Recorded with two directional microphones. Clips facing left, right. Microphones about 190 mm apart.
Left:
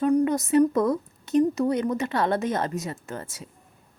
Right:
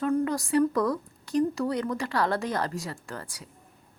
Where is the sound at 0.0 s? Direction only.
20° left (ahead or behind).